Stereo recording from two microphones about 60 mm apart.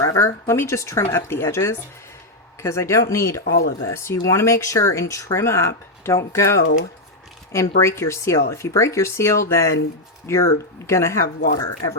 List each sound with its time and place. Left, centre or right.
0.0 s speech: left